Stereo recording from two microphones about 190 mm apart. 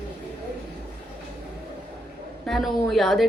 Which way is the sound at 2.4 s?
Centre (ahead or behind).